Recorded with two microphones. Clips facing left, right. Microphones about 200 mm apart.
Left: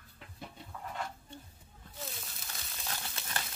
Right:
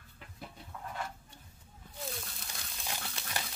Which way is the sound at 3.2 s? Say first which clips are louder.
Right 1 dB; centre (ahead or behind).